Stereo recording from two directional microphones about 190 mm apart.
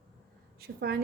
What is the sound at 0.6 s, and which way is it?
Speech, 55° right (ahead or behind).